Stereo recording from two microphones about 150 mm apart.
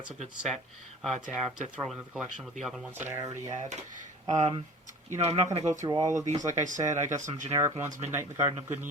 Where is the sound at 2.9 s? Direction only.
15° right (ahead or behind).